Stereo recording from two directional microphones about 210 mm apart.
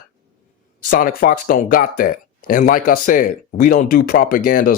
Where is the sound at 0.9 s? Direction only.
45° left (ahead or behind).